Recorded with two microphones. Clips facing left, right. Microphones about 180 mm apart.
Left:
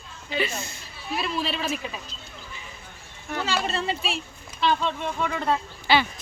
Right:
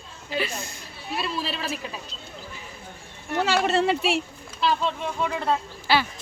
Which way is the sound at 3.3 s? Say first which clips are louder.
Right 6 dB; 65° right (ahead or behind).